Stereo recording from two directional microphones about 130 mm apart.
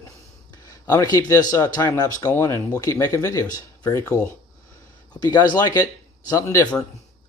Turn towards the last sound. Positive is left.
turn(degrees=25)  # may be behind; listen again after turning